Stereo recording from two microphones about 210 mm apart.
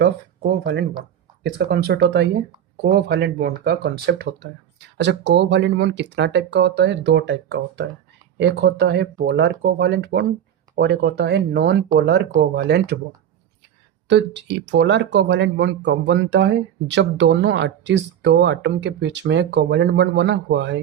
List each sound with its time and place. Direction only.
0.6 s speech: 50° right (ahead or behind)
14.1 s speech: 55° right (ahead or behind)